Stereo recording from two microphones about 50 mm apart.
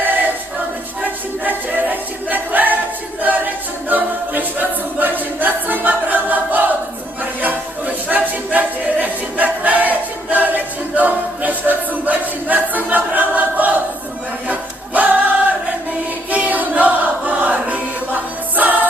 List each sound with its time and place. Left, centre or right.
1.0 s choir: right
3.2 s a capella: right
7.4 s a sound: right
10.3 s music: right
14.4 s choir: right